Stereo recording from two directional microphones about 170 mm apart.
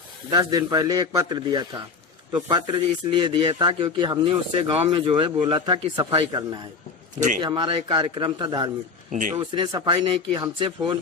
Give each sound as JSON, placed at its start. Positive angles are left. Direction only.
{"t": 0.3, "sound": "speech", "side_deg": -25}
{"t": 7.4, "sound": "speech", "side_deg": -30}